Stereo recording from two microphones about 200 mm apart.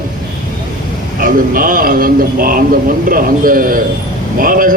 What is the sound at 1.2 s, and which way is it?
Speech, 45° right (ahead or behind).